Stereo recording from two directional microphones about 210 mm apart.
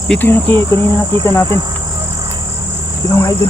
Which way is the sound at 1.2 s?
15° left (ahead or behind).